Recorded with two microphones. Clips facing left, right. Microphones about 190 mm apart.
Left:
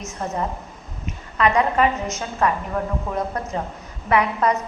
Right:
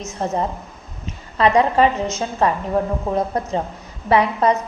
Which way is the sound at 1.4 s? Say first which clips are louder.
Right 3 dB; 30° right (ahead or behind).